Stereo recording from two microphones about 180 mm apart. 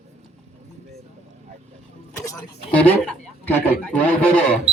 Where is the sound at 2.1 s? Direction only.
20° left (ahead or behind).